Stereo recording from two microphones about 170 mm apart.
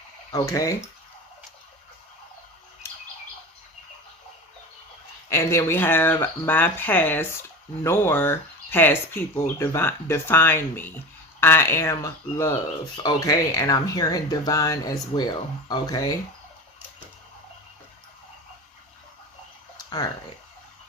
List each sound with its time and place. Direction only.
0.3 s speech: 20° left (ahead or behind)
5.3 s speech: 15° left (ahead or behind)
19.7 s a sound: 25° left (ahead or behind)